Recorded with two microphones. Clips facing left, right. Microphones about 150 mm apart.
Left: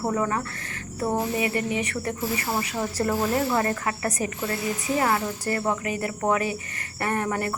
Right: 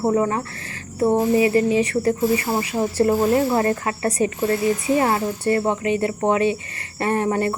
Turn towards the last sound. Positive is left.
turn(degrees=-25)  # may be behind; listen again after turning